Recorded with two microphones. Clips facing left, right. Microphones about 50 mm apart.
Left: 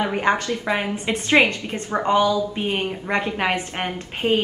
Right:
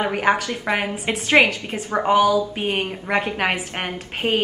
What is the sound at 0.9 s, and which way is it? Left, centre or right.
A woman's voice, centre.